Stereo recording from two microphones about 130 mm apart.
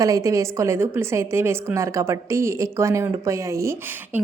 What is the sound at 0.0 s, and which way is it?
A woman's voice, 25° right (ahead or behind).